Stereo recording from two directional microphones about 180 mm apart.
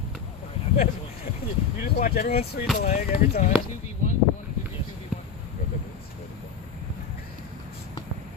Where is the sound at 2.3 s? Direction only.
35° left (ahead or behind).